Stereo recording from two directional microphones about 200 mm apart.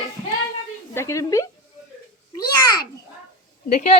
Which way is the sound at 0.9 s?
15° left (ahead or behind).